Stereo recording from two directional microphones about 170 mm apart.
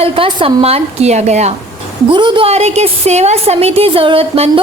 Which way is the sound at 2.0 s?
30° right (ahead or behind).